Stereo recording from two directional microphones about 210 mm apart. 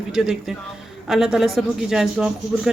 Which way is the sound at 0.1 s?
Centre (ahead or behind).